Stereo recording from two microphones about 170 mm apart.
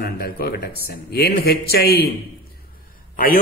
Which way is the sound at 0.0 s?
65° left (ahead or behind).